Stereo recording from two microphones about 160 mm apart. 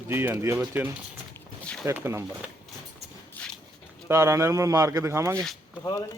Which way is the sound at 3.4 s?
5° left (ahead or behind).